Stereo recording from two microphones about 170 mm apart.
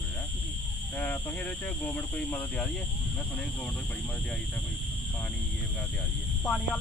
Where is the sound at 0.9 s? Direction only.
10° left (ahead or behind).